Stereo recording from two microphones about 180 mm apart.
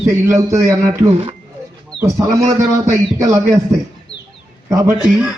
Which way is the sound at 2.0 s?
15° right (ahead or behind).